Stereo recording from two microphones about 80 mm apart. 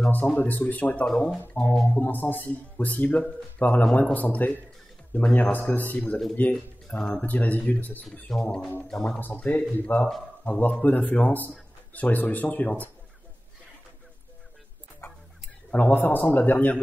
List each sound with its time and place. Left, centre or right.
0.1 s speech: left
1.0 s speech: centre
2.0 s speech: left
8.3 s speech: centre
9.2 s speech: centre
15.0 s a sound: left
15.7 s speech: left